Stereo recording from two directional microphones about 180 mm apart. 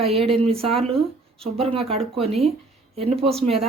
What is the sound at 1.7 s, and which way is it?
Speech, 35° right (ahead or behind).